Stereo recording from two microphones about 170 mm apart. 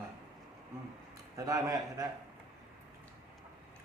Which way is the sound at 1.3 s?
20° right (ahead or behind).